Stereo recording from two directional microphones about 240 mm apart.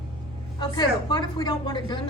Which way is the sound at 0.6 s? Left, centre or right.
Centre.